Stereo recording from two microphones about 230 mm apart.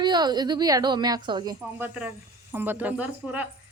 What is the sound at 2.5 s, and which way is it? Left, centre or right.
Speech, centre.